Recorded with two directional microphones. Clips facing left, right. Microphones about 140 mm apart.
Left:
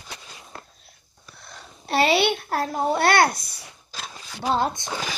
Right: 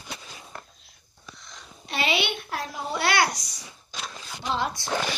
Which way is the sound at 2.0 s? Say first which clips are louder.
Left 7 dB; 40° left (ahead or behind).